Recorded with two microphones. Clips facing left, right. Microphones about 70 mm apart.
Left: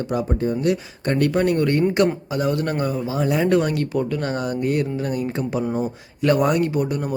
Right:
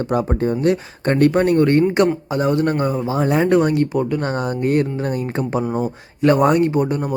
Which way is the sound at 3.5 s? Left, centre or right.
Right.